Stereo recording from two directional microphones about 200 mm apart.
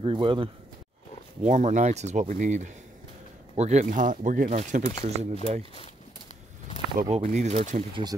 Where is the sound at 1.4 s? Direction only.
35° right (ahead or behind).